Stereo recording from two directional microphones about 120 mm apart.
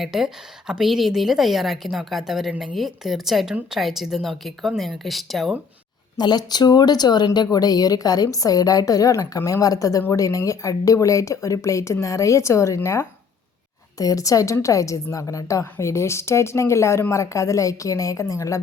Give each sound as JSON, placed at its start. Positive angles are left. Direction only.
{"t": 0.0, "sound": "a woman's voice", "side_deg": 0}
{"t": 6.1, "sound": "a woman's voice", "side_deg": 35}